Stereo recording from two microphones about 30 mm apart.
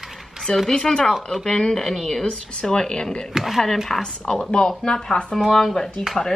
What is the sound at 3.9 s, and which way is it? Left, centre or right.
Speech, centre.